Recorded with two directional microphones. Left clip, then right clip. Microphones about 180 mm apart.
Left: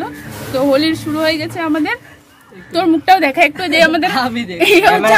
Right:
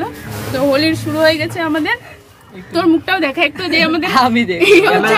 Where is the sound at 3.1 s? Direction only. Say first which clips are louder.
Left 5 dB; 55° left (ahead or behind).